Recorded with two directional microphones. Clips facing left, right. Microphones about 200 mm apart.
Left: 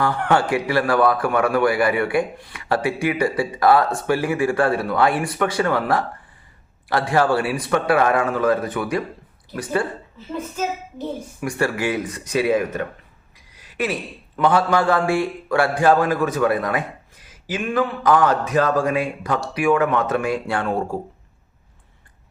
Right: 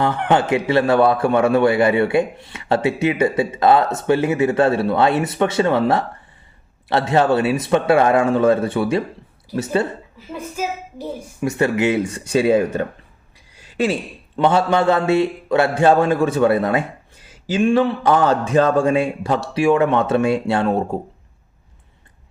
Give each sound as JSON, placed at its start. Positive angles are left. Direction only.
{"t": 0.0, "sound": "a man's voice", "side_deg": -20}
{"t": 10.2, "sound": "a woman's voice", "side_deg": -10}
{"t": 11.3, "sound": "a man's voice", "side_deg": -20}